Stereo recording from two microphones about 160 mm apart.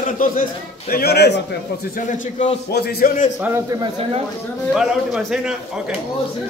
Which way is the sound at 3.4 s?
15° right (ahead or behind).